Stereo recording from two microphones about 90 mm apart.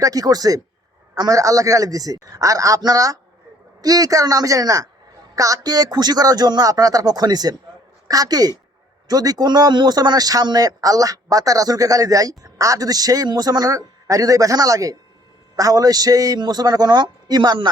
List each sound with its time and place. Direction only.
0.0 s a man's voice: 45° right (ahead or behind)